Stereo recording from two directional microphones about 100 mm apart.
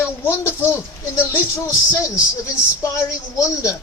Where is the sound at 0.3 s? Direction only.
25° left (ahead or behind).